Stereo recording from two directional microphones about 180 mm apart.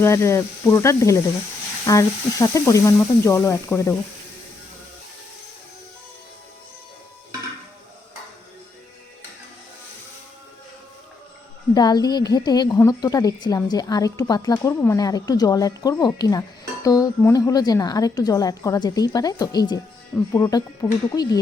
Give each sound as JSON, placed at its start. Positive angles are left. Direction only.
{"t": 0.0, "sound": "speech", "side_deg": 15}
{"t": 11.7, "sound": "a woman's voice", "side_deg": 20}